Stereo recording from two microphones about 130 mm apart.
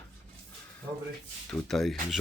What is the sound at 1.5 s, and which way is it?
Speech, 5° left (ahead or behind).